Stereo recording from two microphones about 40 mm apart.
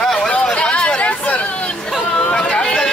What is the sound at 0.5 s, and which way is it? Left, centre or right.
Hubbub, left.